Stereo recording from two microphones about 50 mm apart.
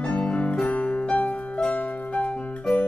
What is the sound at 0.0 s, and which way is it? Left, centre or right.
Music, left.